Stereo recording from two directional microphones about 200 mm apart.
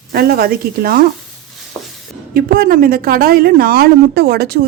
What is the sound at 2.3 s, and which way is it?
A woman's voice, 45° right (ahead or behind).